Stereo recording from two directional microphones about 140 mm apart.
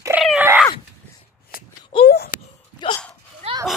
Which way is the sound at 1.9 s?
35° left (ahead or behind).